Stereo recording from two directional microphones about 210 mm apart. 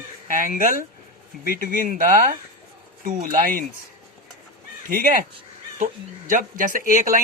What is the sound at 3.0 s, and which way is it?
Speech, 40° right (ahead or behind).